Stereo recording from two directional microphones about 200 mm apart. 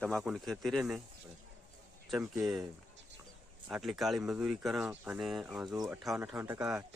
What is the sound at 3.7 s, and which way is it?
Speech, 5° right (ahead or behind).